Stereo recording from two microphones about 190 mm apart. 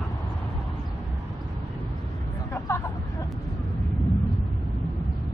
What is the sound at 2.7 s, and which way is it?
Vehicle, 15° left (ahead or behind).